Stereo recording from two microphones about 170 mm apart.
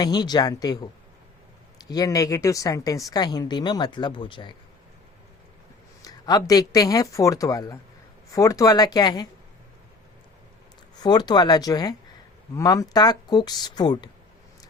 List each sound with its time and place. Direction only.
0.0 s a woman's voice: 25° left (ahead or behind)
1.9 s a woman's voice: 20° left (ahead or behind)
6.1 s a woman's voice: 20° left (ahead or behind)
10.9 s a woman's voice: 25° left (ahead or behind)